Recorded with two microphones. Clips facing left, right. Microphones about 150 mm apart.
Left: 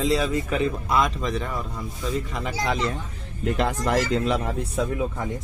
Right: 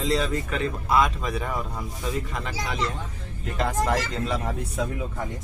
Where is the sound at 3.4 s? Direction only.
70° left (ahead or behind); by 4.8 s 90° left.